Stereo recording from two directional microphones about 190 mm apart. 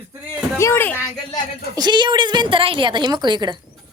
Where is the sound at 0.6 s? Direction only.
15° left (ahead or behind).